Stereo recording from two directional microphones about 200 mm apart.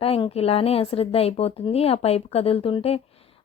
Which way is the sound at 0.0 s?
30° left (ahead or behind).